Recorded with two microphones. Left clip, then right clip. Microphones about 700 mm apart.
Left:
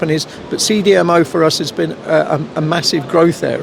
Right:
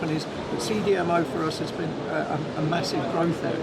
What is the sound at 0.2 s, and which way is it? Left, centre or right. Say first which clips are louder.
Speech: left 10 dB; left.